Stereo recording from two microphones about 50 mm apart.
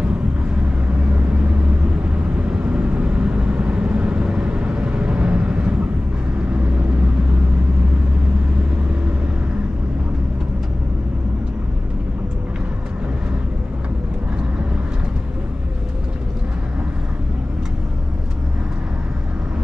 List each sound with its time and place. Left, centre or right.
0.9 s vehicle: right